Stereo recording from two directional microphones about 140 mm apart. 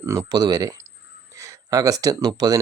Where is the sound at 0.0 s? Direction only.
20° right (ahead or behind).